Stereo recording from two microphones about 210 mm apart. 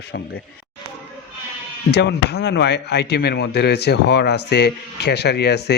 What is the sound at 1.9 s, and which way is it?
A man's voice, 50° left (ahead or behind).